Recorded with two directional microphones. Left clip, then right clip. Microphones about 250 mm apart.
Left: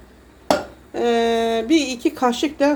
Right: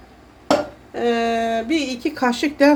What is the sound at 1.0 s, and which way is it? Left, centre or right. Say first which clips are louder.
Speech: left 1 dB; centre.